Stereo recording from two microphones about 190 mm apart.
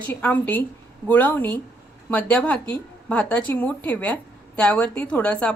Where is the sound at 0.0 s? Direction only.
10° left (ahead or behind).